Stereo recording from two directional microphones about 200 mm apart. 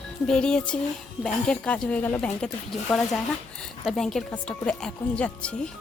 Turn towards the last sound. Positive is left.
turn(degrees=5)  # may be behind; listen again after turning